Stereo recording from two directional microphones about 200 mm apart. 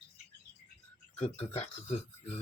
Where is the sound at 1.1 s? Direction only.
30° left (ahead or behind).